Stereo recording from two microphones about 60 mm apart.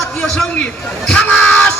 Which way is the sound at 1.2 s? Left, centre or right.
Centre.